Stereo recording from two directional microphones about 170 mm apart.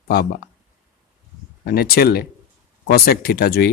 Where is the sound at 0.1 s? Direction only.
60° left (ahead or behind).